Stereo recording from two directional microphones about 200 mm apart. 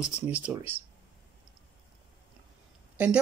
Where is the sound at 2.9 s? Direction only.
5° right (ahead or behind).